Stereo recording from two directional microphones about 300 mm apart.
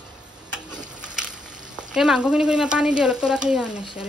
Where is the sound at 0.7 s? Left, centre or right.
Centre.